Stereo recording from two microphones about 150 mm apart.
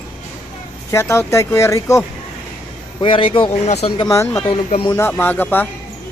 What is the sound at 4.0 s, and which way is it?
Speech, 25° left (ahead or behind).